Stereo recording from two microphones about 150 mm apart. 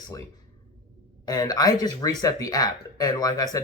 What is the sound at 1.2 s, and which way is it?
Speech, 25° left (ahead or behind).